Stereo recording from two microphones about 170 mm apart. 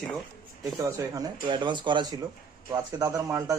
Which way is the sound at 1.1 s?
25° right (ahead or behind).